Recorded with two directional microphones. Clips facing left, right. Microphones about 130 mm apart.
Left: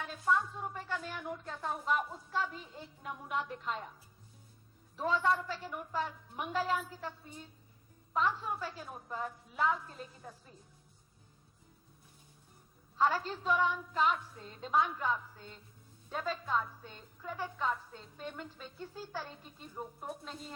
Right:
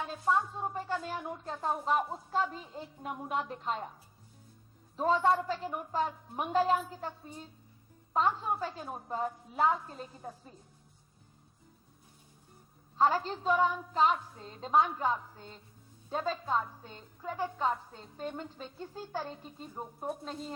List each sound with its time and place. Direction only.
0.0 s a woman's voice: 30° right (ahead or behind)
4.9 s a woman's voice: 35° right (ahead or behind)
13.0 s a woman's voice: 35° right (ahead or behind)